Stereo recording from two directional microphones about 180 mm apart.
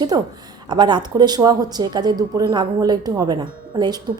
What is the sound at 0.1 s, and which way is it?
A woman's voice, 20° right (ahead or behind).